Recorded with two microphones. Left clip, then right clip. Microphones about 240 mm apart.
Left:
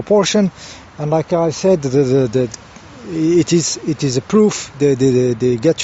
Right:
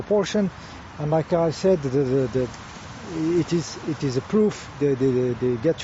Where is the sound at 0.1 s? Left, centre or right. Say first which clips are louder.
Left 9 dB; left.